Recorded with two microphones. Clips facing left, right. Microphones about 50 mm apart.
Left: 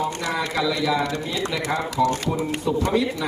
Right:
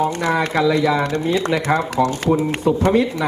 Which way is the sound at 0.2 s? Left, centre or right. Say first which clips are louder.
Right 6 dB; right.